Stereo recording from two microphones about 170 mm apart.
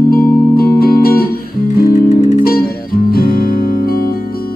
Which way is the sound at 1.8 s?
50° left (ahead or behind).